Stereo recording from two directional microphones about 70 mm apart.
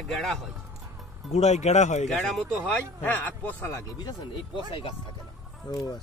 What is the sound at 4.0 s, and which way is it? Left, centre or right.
Speech, left.